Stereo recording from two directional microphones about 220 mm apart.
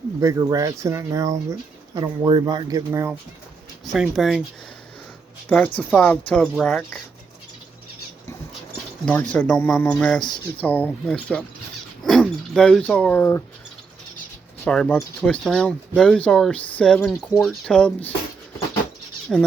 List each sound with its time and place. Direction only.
0.2 s speech: 15° right (ahead or behind)
3.8 s speech: centre (ahead or behind)
5.5 s speech: 5° left (ahead or behind)
9.0 s speech: 5° left (ahead or behind)
14.6 s speech: 5° left (ahead or behind)